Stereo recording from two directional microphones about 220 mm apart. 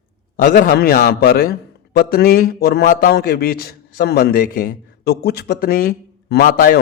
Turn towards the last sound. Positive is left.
turn(degrees=45)  # may be behind; listen again after turning